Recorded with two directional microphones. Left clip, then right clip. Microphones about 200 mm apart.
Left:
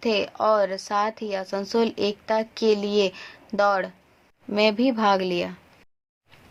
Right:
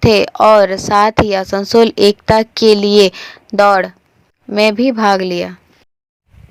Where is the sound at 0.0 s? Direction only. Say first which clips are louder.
Right 13 dB; 30° right (ahead or behind).